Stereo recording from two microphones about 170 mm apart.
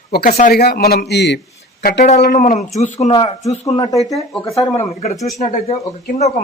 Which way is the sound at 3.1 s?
25° left (ahead or behind).